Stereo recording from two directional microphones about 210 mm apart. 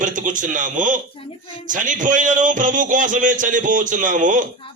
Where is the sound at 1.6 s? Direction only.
40° right (ahead or behind).